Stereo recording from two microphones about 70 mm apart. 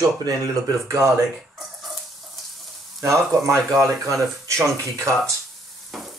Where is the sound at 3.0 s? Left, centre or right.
Right.